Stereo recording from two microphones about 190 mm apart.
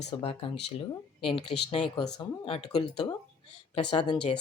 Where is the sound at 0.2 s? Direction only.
30° left (ahead or behind).